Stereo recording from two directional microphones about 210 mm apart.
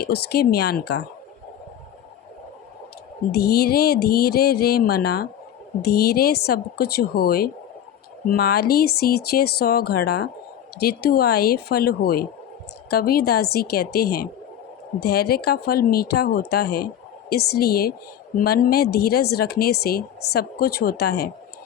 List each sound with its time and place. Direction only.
0.0 s speech: 50° left (ahead or behind)
3.3 s speech: 50° left (ahead or behind)